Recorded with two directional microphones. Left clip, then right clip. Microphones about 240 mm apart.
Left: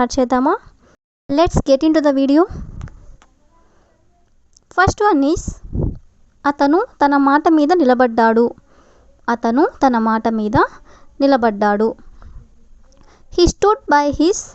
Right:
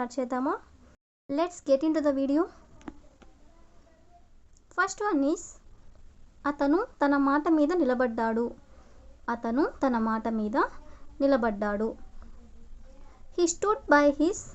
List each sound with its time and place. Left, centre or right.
0.0 s speech: left
4.7 s a woman's voice: left